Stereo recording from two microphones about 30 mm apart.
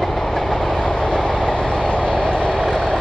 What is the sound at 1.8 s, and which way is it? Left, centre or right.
Vehicle, left.